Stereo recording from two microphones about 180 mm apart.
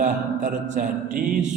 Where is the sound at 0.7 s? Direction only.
40° right (ahead or behind).